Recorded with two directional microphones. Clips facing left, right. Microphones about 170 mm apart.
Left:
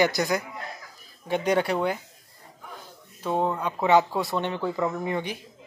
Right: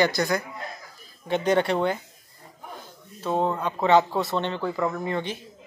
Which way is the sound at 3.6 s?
10° left (ahead or behind).